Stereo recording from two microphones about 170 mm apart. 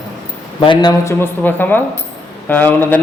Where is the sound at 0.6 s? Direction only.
30° left (ahead or behind).